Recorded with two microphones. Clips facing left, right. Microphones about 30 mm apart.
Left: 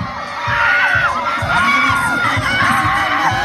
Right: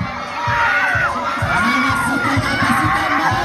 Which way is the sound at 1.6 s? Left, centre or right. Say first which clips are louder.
Left 4 dB; centre.